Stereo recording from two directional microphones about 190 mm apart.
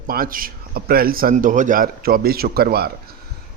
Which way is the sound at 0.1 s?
50° right (ahead or behind).